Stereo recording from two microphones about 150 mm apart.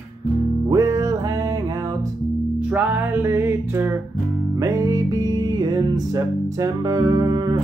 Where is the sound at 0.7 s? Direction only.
20° right (ahead or behind).